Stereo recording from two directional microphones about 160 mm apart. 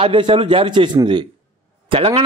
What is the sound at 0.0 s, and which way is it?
A man's voice, 30° right (ahead or behind).